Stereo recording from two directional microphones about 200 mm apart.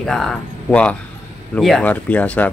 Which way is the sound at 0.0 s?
Centre (ahead or behind).